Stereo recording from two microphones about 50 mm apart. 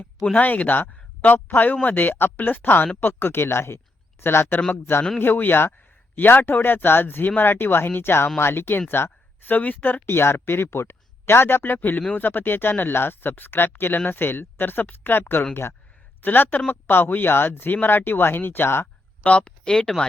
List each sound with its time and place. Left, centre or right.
0.3 s speech: left
8.9 s a sound: left
9.6 s speech: left
19.4 s speech: centre